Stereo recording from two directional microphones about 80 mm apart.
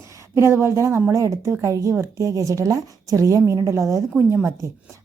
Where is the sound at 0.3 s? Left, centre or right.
Right.